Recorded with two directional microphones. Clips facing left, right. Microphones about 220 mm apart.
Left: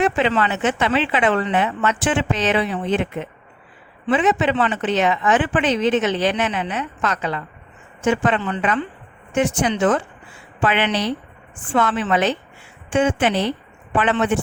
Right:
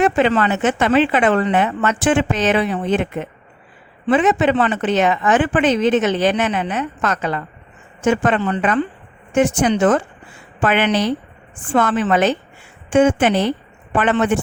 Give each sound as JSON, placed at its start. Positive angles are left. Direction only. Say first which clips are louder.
{"t": 0.0, "sound": "speech", "louder": "right 3 dB", "side_deg": -45}